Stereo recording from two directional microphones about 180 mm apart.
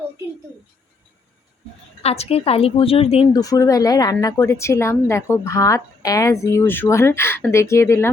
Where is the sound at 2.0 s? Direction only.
35° left (ahead or behind).